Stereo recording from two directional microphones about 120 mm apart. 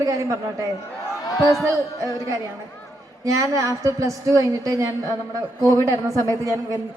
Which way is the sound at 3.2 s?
30° right (ahead or behind).